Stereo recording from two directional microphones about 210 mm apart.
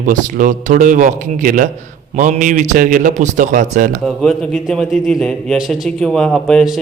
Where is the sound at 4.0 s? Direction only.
Centre (ahead or behind).